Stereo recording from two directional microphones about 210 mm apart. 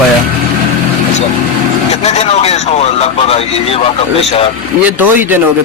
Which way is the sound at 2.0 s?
30° left (ahead or behind).